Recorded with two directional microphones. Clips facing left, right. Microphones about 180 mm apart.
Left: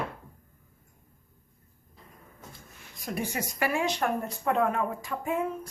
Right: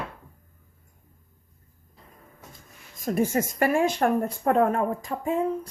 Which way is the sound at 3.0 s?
45° right (ahead or behind).